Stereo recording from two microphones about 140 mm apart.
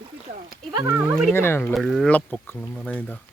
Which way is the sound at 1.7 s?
Centre (ahead or behind).